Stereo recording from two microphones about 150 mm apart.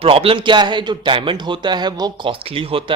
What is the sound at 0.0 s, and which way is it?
A man's voice, 40° right (ahead or behind).